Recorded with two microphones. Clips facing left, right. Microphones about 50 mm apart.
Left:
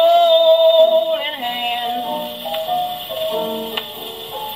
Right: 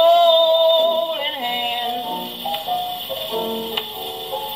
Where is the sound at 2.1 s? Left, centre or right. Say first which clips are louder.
Left 2 dB; left.